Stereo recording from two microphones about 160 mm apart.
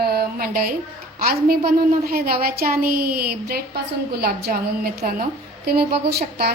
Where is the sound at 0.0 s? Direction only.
70° right (ahead or behind).